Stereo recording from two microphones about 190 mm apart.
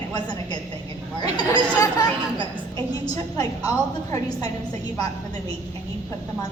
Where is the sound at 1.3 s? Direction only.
20° left (ahead or behind).